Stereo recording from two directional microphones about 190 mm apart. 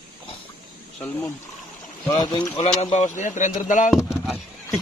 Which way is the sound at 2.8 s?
35° left (ahead or behind).